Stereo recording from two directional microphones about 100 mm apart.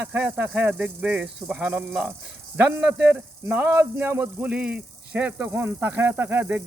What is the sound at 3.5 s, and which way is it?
A man's voice, 25° right (ahead or behind).